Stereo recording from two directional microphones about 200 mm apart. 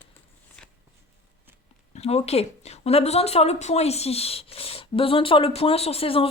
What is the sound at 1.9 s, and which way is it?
Speech, 30° left (ahead or behind).